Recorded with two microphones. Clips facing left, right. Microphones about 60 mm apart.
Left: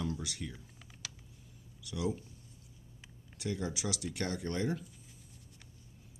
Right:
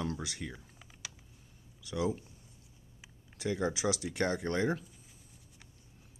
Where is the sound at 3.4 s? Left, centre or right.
Right.